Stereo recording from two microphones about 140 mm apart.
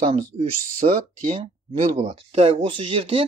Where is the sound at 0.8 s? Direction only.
55° right (ahead or behind).